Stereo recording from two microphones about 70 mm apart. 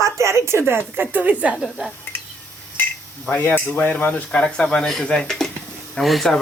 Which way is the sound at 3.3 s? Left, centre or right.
Left.